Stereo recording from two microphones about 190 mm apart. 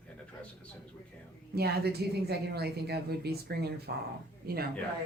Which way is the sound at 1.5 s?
55° right (ahead or behind).